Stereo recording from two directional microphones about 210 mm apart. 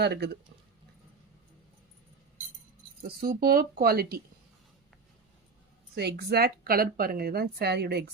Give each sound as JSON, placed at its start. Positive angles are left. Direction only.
{"t": 0.0, "sound": "a woman's voice", "side_deg": -50}
{"t": 3.0, "sound": "a woman's voice", "side_deg": -45}
{"t": 5.9, "sound": "a woman's voice", "side_deg": -50}